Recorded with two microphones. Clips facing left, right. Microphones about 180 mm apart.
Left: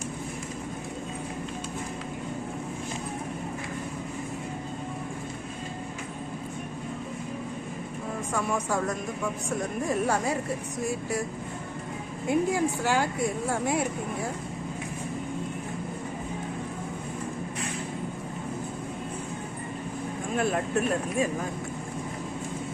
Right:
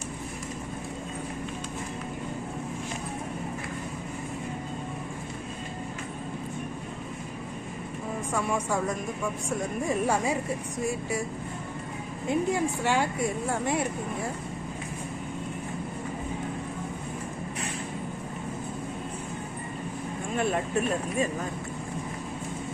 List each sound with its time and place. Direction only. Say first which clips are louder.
9.9 s a woman's voice: even; 5° right (ahead or behind)
12.3 s a woman's voice: left 1 dB; 5° left (ahead or behind)
20.3 s a woman's voice: left 1 dB; centre (ahead or behind)